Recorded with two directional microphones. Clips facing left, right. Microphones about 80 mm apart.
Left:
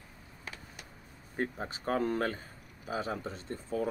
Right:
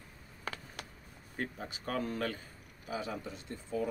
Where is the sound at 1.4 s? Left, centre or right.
Left.